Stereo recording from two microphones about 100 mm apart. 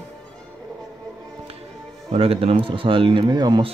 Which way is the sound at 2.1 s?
80° right.